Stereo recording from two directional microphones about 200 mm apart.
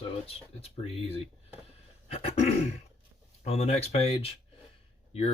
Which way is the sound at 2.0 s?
30° left (ahead or behind).